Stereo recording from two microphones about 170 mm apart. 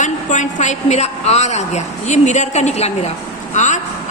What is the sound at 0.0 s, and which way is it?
A woman's voice, 45° left (ahead or behind).